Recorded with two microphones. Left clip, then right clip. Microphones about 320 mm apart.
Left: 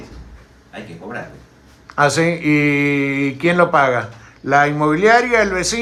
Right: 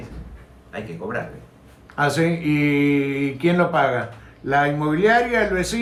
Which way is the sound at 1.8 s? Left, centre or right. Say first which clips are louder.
Left 5 dB; left.